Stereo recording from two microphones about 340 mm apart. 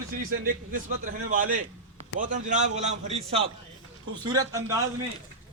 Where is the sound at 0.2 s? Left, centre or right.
Right.